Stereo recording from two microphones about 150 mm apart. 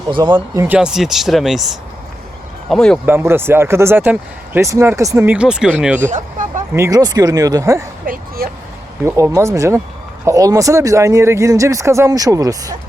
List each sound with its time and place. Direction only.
0.2 s speech: 25° right (ahead or behind)
0.8 s speech: 5° right (ahead or behind)
3.1 s speech: 15° right (ahead or behind)
6.1 s a sound: 55° right (ahead or behind)
6.7 s speech: 20° right (ahead or behind)
8.0 s a sound: 70° right (ahead or behind)
9.0 s speech: 20° right (ahead or behind)